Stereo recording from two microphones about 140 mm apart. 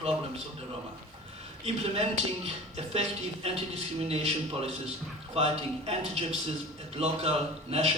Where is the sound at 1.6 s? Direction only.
45° right (ahead or behind).